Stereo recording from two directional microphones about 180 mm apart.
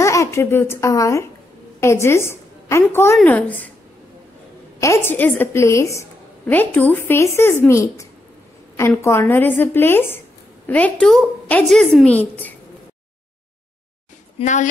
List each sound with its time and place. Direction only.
0.0 s a woman's voice: 15° left (ahead or behind)
4.7 s a woman's voice: 15° left (ahead or behind)
14.4 s a woman's voice: 40° left (ahead or behind)